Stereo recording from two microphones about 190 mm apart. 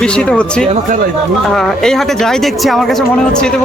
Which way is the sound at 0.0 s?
5° left (ahead or behind).